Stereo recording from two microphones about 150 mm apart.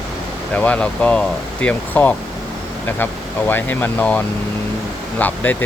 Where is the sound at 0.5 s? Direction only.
10° left (ahead or behind).